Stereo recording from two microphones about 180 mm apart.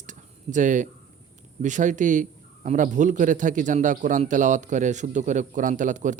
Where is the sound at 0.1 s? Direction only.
45° right (ahead or behind).